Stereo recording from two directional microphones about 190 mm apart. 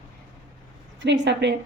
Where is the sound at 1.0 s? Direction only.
65° right (ahead or behind).